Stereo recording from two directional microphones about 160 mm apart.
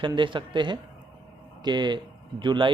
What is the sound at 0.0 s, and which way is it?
Speech, 30° right (ahead or behind).